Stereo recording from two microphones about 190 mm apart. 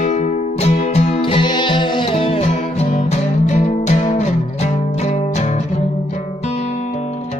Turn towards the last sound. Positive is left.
turn(degrees=35)  # may be behind; listen again after turning